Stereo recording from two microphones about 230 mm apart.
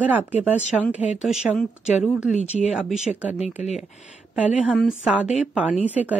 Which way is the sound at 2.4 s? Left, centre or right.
Left.